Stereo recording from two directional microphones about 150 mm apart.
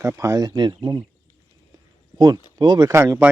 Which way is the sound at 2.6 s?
30° right (ahead or behind).